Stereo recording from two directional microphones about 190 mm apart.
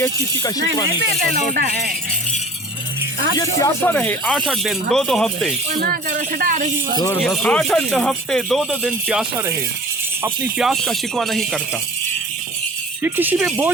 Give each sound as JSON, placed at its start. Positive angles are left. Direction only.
{"t": 0.0, "sound": "speech", "side_deg": 20}
{"t": 1.5, "sound": "speech", "side_deg": -55}
{"t": 3.3, "sound": "speech", "side_deg": 15}
{"t": 6.4, "sound": "a man's voice", "side_deg": -45}
{"t": 7.2, "sound": "speech", "side_deg": 5}
{"t": 10.2, "sound": "speech", "side_deg": -10}
{"t": 10.7, "sound": "speech", "side_deg": 0}
{"t": 13.0, "sound": "speech", "side_deg": -10}